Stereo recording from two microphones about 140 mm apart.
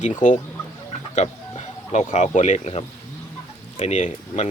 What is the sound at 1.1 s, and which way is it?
Speech, 50° left (ahead or behind).